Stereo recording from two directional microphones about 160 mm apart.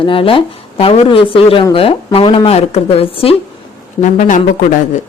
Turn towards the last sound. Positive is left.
turn(degrees=55)  # may be behind; listen again after turning